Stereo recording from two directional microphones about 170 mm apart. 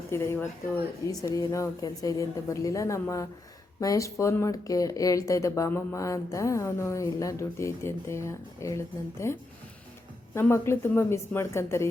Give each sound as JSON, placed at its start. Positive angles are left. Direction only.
{"t": 0.1, "sound": "a woman's voice", "side_deg": 15}